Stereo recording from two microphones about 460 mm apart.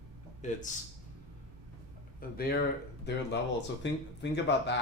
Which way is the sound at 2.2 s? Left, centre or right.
Centre.